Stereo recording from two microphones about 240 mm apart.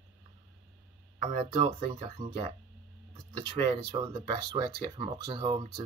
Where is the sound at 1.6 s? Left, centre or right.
Right.